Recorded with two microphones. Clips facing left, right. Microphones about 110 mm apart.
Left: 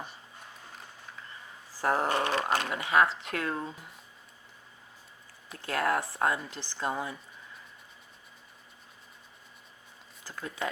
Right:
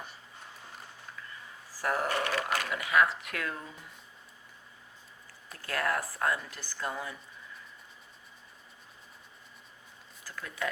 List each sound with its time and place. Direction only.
1.8 s speech: 25° left (ahead or behind)
5.6 s a woman's voice: 25° left (ahead or behind)
10.2 s speech: 25° left (ahead or behind)